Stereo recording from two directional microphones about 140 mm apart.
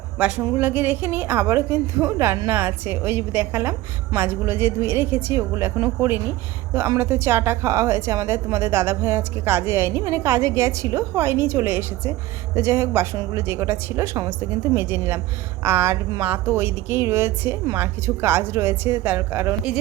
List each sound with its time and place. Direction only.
0.2 s a woman's voice: 10° right (ahead or behind)